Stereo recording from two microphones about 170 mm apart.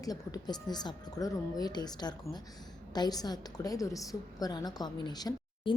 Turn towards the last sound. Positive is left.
turn(degrees=25)  # may be behind; listen again after turning